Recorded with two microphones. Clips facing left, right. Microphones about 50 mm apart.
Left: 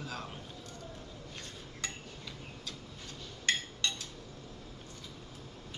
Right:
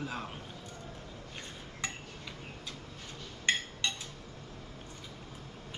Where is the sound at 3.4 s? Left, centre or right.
Centre.